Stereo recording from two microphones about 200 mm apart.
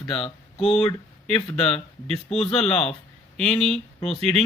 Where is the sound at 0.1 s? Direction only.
25° left (ahead or behind).